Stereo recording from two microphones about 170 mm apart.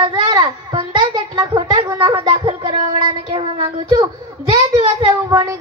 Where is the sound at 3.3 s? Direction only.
25° right (ahead or behind).